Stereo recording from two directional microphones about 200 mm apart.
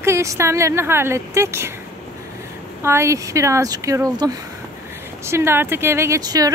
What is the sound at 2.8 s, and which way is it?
Speech, 15° right (ahead or behind).